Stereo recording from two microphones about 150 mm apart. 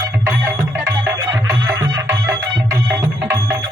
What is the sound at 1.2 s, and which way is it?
Music, 25° right (ahead or behind).